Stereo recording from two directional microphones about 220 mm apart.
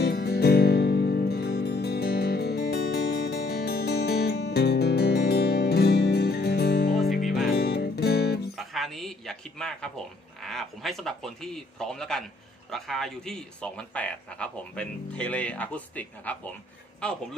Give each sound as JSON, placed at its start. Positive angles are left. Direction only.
{"t": 0.0, "sound": "music", "side_deg": 45}
{"t": 8.5, "sound": "a sound", "side_deg": 0}
{"t": 10.4, "sound": "speech", "side_deg": 0}